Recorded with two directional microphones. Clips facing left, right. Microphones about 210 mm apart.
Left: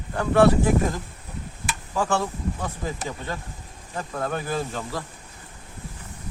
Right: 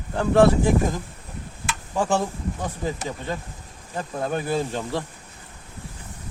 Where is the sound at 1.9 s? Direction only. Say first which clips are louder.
Right 2 dB; 15° right (ahead or behind).